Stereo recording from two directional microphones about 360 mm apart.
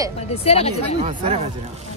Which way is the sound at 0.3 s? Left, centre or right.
Centre.